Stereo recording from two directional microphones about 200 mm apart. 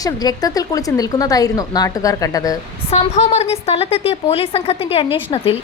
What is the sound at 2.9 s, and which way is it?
A woman's voice, 30° left (ahead or behind).